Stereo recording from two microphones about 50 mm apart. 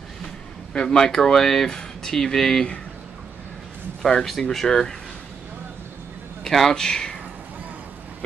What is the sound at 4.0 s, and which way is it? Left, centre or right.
Speech, centre.